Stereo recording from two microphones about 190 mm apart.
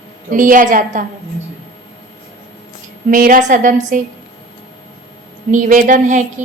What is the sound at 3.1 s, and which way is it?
Speech, 45° right (ahead or behind).